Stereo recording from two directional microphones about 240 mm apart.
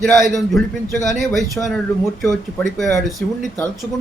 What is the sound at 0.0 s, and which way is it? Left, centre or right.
A man's voice, centre.